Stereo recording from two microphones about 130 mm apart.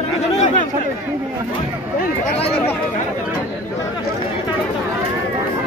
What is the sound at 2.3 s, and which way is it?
Speech, 50° left (ahead or behind).